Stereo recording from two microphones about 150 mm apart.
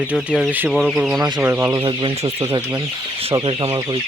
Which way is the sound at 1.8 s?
30° right (ahead or behind).